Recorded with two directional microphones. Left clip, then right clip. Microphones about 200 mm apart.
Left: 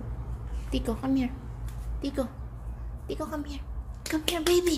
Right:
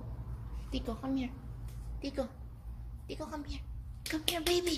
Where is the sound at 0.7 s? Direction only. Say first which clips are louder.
Left 8 dB; 20° left (ahead or behind).